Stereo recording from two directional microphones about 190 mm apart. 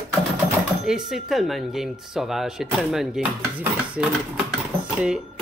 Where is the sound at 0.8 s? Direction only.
Centre (ahead or behind).